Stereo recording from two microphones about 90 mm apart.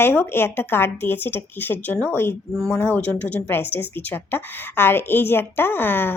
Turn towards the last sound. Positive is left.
turn(degrees=25)  # may be behind; listen again after turning